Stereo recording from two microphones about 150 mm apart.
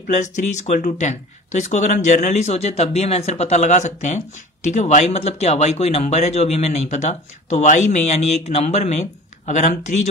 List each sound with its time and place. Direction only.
0.0 s speech: 55° left (ahead or behind)